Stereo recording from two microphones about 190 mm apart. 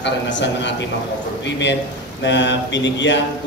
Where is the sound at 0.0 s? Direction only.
70° left (ahead or behind).